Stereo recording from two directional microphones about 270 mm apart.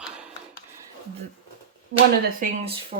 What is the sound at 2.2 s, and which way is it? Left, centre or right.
Speech, right.